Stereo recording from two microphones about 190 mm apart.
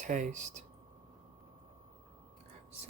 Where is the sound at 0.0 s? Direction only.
40° right (ahead or behind).